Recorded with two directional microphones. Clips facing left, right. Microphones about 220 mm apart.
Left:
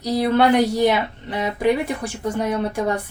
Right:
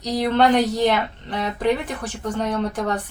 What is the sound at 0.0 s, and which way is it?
Speech, 10° left (ahead or behind).